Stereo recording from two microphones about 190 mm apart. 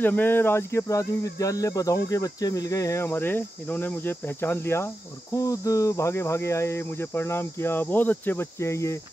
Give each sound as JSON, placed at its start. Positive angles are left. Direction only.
{"t": 0.0, "sound": "cricket", "side_deg": 10}